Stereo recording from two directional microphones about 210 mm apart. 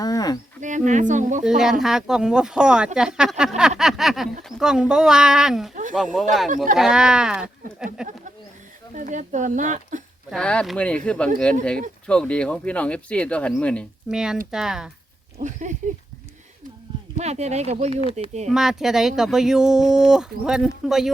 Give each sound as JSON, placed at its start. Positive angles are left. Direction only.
{"t": 0.0, "sound": "wild animals", "side_deg": 15}
{"t": 0.6, "sound": "speech", "side_deg": -35}
{"t": 1.5, "sound": "speech", "side_deg": 0}
{"t": 3.8, "sound": "a sound", "side_deg": 0}
{"t": 4.4, "sound": "speech", "side_deg": -5}
{"t": 9.0, "sound": "speech", "side_deg": -35}
{"t": 10.2, "sound": "speech", "side_deg": 5}
{"t": 15.4, "sound": "speech", "side_deg": -35}
{"t": 17.2, "sound": "speech", "side_deg": -30}
{"t": 18.4, "sound": "speech", "side_deg": 0}